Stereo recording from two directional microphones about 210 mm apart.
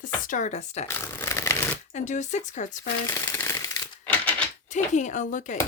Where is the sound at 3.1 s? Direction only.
10° left (ahead or behind).